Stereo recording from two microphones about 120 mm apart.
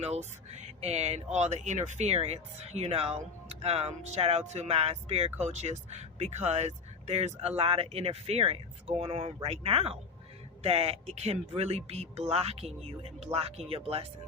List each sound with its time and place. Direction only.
0.0 s speech: 65° right (ahead or behind)